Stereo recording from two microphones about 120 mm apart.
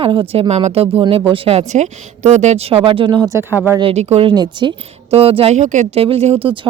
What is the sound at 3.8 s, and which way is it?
Speech, 65° right (ahead or behind).